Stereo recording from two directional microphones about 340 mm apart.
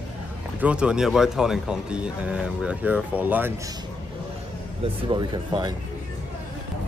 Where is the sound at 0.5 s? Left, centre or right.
Centre.